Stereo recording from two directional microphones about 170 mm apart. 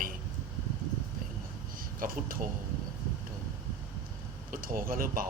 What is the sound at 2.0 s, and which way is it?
Speech, 55° right (ahead or behind).